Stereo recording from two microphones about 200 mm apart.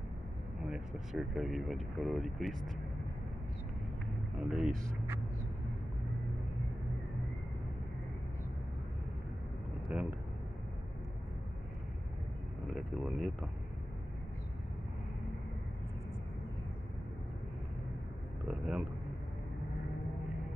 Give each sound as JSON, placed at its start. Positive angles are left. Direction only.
{"t": 0.7, "sound": "speech", "side_deg": -5}
{"t": 4.4, "sound": "speech", "side_deg": -5}
{"t": 12.6, "sound": "speech", "side_deg": 0}
{"t": 18.4, "sound": "a sound", "side_deg": -5}